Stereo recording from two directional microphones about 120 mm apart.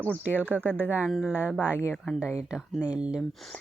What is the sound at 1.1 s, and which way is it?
Speech, 5° right (ahead or behind).